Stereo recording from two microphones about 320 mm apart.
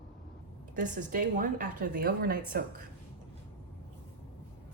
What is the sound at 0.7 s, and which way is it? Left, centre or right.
A woman's voice, right.